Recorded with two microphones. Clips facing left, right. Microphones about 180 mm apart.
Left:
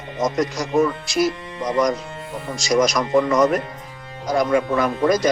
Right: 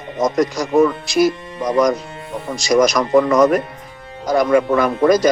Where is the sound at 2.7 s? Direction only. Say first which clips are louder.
Right 4 dB; 70° right (ahead or behind).